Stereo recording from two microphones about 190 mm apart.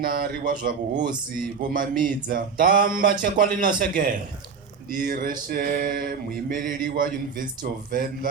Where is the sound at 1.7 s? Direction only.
45° right (ahead or behind).